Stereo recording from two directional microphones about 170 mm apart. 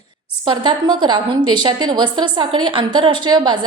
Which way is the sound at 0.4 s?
30° right (ahead or behind).